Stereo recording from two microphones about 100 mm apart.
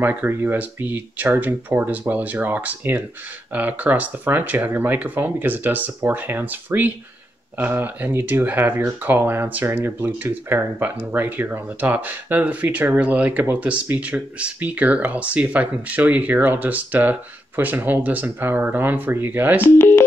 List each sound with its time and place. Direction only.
0.0 s speech: 20° right (ahead or behind)
19.6 s speech: 25° left (ahead or behind)